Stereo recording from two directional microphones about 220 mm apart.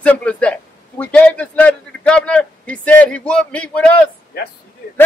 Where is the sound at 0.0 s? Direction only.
5° left (ahead or behind).